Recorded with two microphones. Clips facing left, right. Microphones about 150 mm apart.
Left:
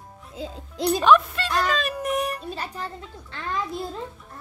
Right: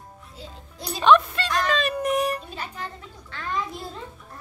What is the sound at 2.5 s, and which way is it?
Speech, 35° left (ahead or behind).